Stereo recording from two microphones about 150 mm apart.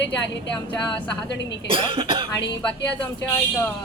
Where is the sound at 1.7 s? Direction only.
35° right (ahead or behind).